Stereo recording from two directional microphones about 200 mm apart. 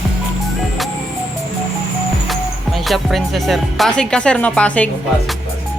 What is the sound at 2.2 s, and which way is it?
Speech, centre (ahead or behind).